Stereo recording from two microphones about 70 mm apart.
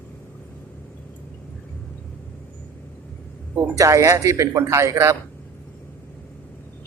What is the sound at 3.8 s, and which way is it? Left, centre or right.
Speech, right.